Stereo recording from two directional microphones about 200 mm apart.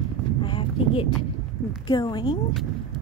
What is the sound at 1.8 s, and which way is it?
Speech, 20° left (ahead or behind).